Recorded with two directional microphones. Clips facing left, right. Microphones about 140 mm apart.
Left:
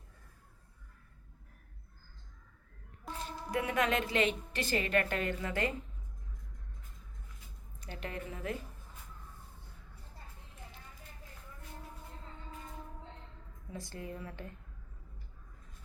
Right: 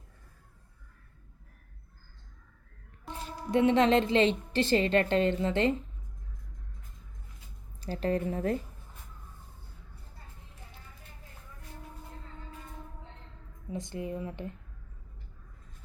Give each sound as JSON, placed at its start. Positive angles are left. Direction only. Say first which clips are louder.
{"t": 3.5, "sound": "a woman's voice", "louder": "right 9 dB", "side_deg": -25}
{"t": 7.8, "sound": "speech", "louder": "right 12 dB", "side_deg": -35}
{"t": 13.7, "sound": "a woman's voice", "louder": "right 7 dB", "side_deg": -20}